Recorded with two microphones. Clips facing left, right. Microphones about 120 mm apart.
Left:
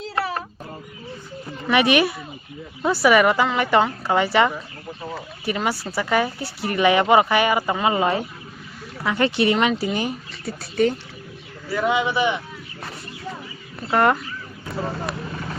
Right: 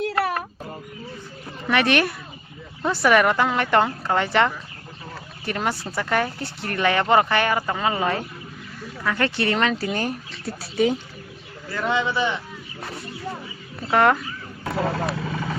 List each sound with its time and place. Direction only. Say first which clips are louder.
1.7 s a woman's voice: left 2 dB; 10° left (ahead or behind)
5.1 s a sound: left 2 dB; 5° left (ahead or behind)
5.8 s speech: left 2 dB; 5° left (ahead or behind)
10.4 s a woman's voice: left 1 dB; centre (ahead or behind)
11.7 s speech: left 2 dB; 15° left (ahead or behind)
13.9 s a woman's voice: even; 5° left (ahead or behind)
14.6 s vehicle: right 4 dB; 90° right